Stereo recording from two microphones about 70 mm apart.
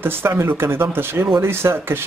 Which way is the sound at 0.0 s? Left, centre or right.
Right.